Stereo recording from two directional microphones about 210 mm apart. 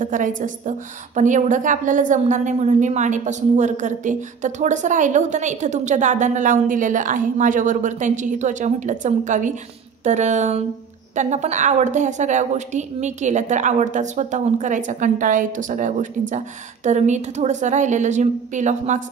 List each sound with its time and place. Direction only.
0.0 s a woman's voice: 40° right (ahead or behind)